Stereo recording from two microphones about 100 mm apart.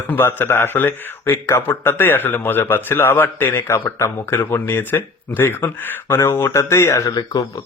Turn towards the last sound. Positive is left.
turn(degrees=40)  # may be behind; listen again after turning